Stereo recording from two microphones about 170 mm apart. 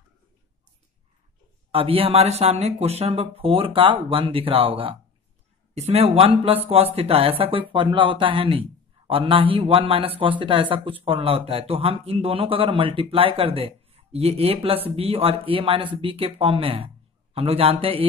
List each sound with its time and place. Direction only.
1.7 s speech: 35° right (ahead or behind)